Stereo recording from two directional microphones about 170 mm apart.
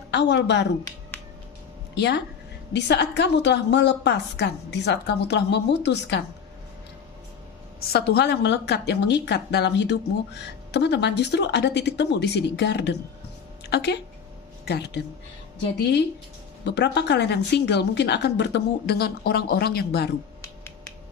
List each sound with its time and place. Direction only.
0.1 s a woman's voice: 85° left
1.1 s finger snapping: 10° left (ahead or behind)
2.0 s a woman's voice: 80° left
7.9 s a woman's voice: 75° left (ahead or behind); by 12.9 s 90° left
13.7 s speech: 80° left
16.6 s a woman's voice: 90° left; by 20.1 s 70° left (ahead or behind)